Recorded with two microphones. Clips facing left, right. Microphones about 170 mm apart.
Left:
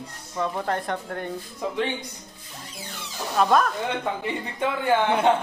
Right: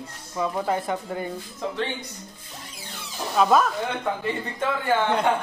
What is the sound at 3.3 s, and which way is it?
Speech, 5° right (ahead or behind).